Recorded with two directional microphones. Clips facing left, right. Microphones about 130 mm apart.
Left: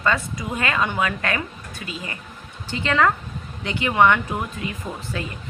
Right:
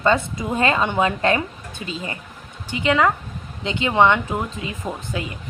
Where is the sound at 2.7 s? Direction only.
15° right (ahead or behind).